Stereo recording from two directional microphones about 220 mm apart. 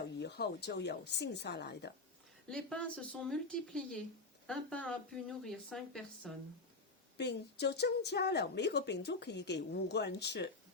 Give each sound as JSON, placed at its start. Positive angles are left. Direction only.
{"t": 0.2, "sound": "a woman's voice", "side_deg": 50}
{"t": 2.5, "sound": "speech", "side_deg": 5}
{"t": 7.2, "sound": "a woman's voice", "side_deg": 50}